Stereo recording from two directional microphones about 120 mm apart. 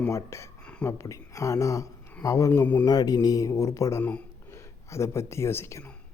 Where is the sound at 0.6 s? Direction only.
10° left (ahead or behind).